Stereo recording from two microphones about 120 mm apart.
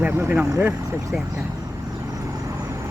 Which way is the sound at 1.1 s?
5° right (ahead or behind).